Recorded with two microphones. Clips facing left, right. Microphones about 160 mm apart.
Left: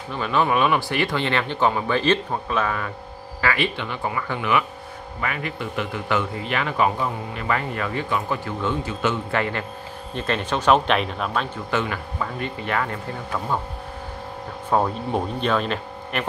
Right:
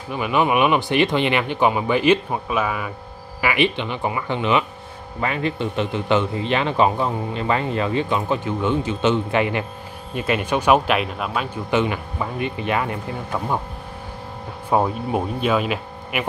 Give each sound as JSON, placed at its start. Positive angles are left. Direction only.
{"t": 0.1, "sound": "speech", "side_deg": -15}
{"t": 11.7, "sound": "speech", "side_deg": -20}
{"t": 14.7, "sound": "speech", "side_deg": -10}